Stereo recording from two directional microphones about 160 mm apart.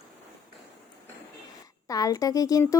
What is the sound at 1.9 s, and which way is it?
Speech, 20° left (ahead or behind).